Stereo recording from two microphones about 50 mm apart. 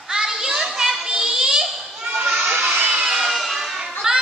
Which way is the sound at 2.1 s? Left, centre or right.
Right.